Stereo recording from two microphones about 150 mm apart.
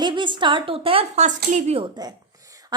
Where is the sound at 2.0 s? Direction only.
25° right (ahead or behind).